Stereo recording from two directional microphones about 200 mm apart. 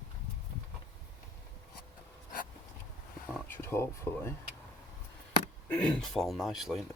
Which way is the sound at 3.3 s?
10° left (ahead or behind).